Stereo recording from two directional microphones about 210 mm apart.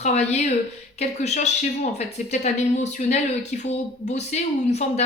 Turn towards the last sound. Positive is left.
turn(degrees=30)  # may be behind; listen again after turning